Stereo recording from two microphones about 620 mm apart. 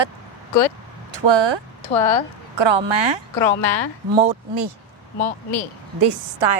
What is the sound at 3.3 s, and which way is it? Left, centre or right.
Speech, left.